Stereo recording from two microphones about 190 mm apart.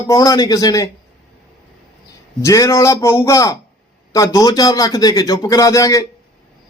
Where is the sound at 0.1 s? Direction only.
20° left (ahead or behind).